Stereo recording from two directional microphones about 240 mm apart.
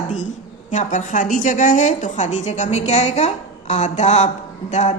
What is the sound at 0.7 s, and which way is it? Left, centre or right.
A woman's voice, left.